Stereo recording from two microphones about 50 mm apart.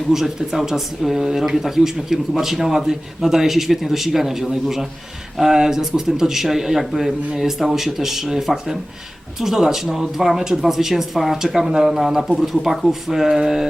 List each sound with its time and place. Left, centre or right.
0.1 s speech: centre